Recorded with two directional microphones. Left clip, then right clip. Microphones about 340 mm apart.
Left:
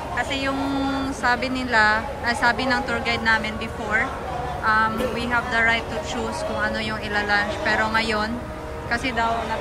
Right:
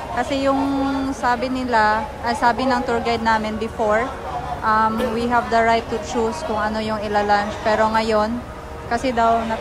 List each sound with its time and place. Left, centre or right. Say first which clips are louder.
0.3 s speech: right 5 dB; centre